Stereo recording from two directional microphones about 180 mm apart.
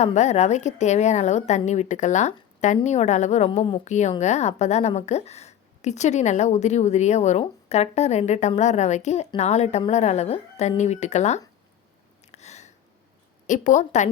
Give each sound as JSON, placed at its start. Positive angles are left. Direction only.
{"t": 0.0, "sound": "a woman's voice", "side_deg": 40}
{"t": 12.3, "sound": "a sound", "side_deg": 40}
{"t": 13.5, "sound": "a woman's voice", "side_deg": 45}